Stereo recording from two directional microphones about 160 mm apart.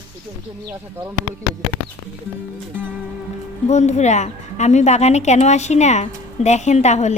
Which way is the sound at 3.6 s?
45° left (ahead or behind).